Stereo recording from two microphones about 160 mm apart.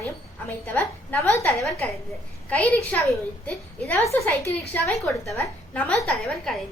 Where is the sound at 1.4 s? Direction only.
Centre (ahead or behind).